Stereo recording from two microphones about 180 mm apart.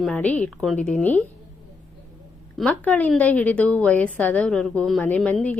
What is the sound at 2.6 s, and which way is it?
A woman's voice, 5° left (ahead or behind).